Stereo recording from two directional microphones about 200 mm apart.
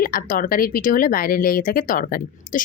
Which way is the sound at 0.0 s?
45° left (ahead or behind).